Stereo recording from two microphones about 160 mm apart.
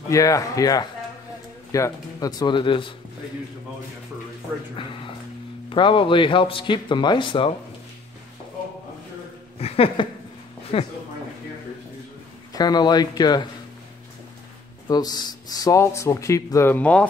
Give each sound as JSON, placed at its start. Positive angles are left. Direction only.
{"t": 0.1, "sound": "speech", "side_deg": 20}
{"t": 4.7, "sound": "speech", "side_deg": 30}
{"t": 9.6, "sound": "speech", "side_deg": 40}
{"t": 12.5, "sound": "speech", "side_deg": 25}
{"t": 14.9, "sound": "speech", "side_deg": 25}